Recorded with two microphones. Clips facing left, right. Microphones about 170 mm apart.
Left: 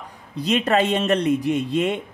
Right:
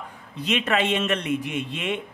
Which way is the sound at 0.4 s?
40° left (ahead or behind).